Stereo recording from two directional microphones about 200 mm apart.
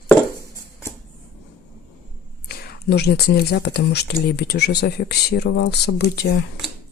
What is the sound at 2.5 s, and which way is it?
Speech, 50° left (ahead or behind).